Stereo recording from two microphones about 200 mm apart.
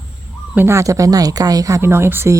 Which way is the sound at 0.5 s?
15° right (ahead or behind).